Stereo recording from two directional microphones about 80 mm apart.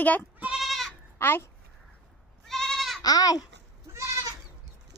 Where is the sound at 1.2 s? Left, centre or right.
Left.